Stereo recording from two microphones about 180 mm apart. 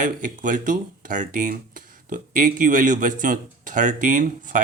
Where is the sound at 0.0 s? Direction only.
45° right (ahead or behind).